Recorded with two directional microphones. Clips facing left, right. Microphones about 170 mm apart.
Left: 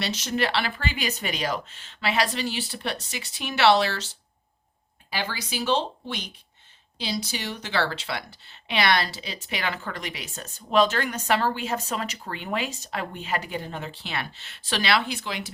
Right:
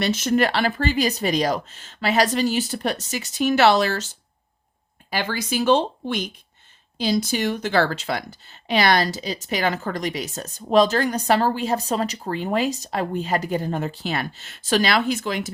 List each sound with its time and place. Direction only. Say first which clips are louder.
0.0 s speech: right 7 dB; 50° right (ahead or behind)